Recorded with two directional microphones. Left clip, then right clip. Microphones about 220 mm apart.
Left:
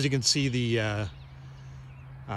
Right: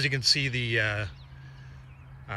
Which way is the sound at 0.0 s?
10° left (ahead or behind).